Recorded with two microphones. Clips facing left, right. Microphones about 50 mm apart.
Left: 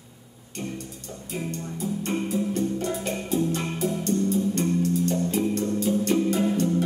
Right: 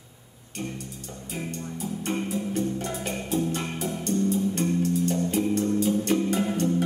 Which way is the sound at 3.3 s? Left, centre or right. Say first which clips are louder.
Left 1 dB; centre.